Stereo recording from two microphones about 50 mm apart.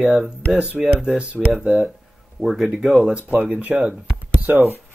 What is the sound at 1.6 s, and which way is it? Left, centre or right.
Speech, centre.